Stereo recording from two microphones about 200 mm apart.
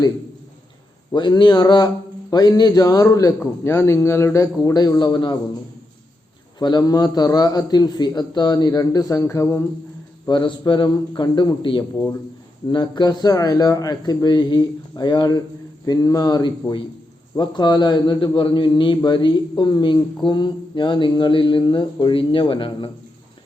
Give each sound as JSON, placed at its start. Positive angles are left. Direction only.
{"t": 1.1, "sound": "a man's voice", "side_deg": 25}
{"t": 6.6, "sound": "a man's voice", "side_deg": 20}